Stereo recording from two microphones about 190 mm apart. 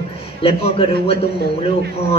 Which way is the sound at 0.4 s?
30° left (ahead or behind).